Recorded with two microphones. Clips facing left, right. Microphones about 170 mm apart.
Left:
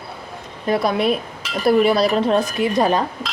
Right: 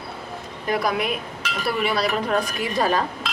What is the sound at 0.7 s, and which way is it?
A woman's voice, 30° left (ahead or behind).